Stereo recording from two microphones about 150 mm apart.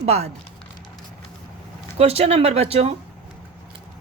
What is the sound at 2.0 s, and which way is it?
Speech, 45° right (ahead or behind).